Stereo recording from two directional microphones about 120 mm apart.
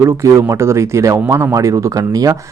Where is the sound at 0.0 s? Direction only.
25° right (ahead or behind).